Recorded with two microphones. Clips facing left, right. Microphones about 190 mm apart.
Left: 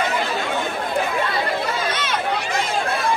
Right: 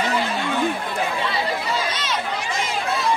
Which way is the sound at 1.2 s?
55° left (ahead or behind).